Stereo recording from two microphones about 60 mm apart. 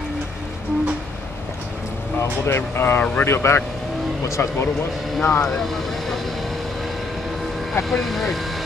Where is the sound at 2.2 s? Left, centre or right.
Left.